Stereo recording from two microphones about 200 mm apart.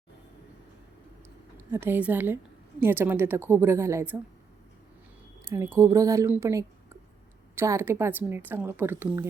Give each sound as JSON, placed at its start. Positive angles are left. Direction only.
{"t": 1.5, "sound": "a woman's voice", "side_deg": -10}
{"t": 5.5, "sound": "a woman's voice", "side_deg": -15}